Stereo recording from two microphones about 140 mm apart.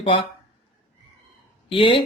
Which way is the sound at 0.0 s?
35° left (ahead or behind).